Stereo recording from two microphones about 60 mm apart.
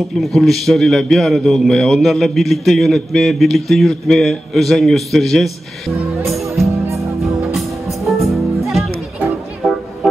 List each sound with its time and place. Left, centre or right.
0.1 s a man's voice: centre
8.0 s music: centre